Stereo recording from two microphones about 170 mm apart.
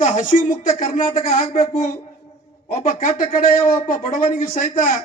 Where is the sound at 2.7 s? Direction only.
55° left (ahead or behind).